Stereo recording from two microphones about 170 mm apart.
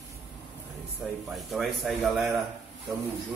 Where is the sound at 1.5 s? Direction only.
Centre (ahead or behind).